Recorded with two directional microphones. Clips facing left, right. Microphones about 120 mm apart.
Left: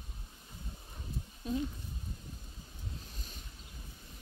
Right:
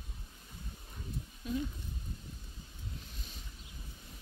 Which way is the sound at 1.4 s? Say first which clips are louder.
Left 1 dB; 35° left (ahead or behind).